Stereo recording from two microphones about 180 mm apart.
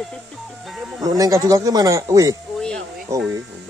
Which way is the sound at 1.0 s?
20° right (ahead or behind).